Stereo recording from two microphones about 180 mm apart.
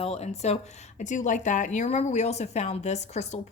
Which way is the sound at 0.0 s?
35° left (ahead or behind).